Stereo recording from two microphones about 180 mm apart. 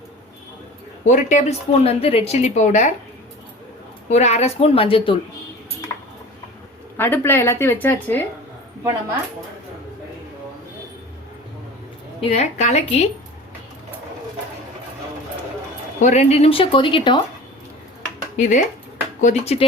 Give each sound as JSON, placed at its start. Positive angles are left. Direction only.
{"t": 1.0, "sound": "a woman's voice", "side_deg": 40}
{"t": 4.1, "sound": "a woman's voice", "side_deg": 35}
{"t": 5.9, "sound": "ping", "side_deg": 15}
{"t": 6.9, "sound": "a woman's voice", "side_deg": 10}
{"t": 12.2, "sound": "a woman's voice", "side_deg": 35}
{"t": 16.0, "sound": "a woman's voice", "side_deg": 40}
{"t": 18.3, "sound": "a woman's voice", "side_deg": 40}